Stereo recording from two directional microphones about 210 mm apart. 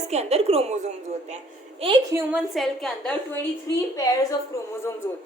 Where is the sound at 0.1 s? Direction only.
30° right (ahead or behind).